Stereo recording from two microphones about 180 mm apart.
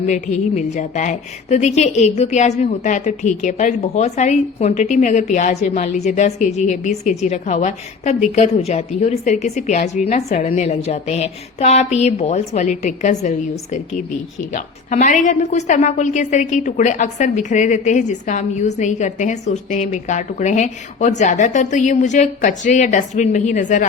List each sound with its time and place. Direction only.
0.0 s a woman's voice: 40° left (ahead or behind)
14.5 s a woman's voice: 45° left (ahead or behind)